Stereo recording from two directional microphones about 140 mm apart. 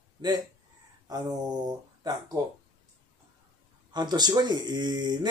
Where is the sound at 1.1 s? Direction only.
30° right (ahead or behind).